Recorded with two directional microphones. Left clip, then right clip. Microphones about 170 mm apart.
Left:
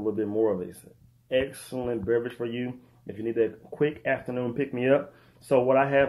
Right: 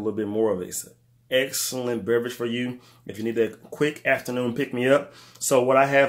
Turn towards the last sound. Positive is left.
turn(degrees=-25)  # may be behind; listen again after turning